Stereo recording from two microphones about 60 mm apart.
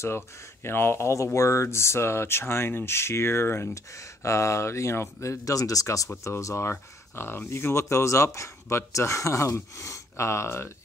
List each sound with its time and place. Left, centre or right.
0.7 s speech: left
3.7 s speech: left
6.2 s speech: left